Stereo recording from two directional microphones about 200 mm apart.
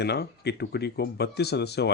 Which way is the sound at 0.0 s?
55° left (ahead or behind).